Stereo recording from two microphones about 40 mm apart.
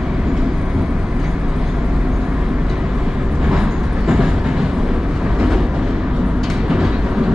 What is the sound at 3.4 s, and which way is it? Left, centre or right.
Train, right.